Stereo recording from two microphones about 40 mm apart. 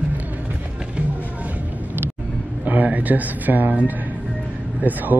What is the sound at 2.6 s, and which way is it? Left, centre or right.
Speech, right.